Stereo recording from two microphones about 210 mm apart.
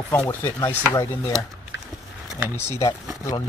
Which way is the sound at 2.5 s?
10° left (ahead or behind).